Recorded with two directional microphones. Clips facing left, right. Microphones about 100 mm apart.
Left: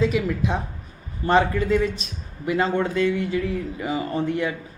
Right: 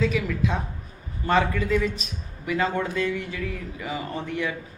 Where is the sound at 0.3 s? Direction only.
30° left (ahead or behind).